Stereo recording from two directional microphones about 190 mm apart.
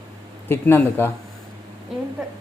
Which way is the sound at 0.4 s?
10° left (ahead or behind).